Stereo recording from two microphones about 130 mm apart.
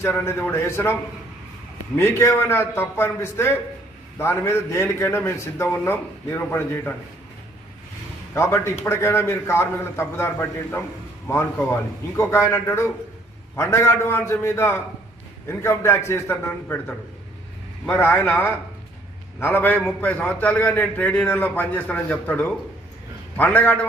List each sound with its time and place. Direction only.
0.0 s a man's voice: 15° left (ahead or behind)
2.0 s a man's voice: 20° left (ahead or behind)
8.4 s a man's voice: 20° left (ahead or behind)
17.8 s a man's voice: 15° left (ahead or behind)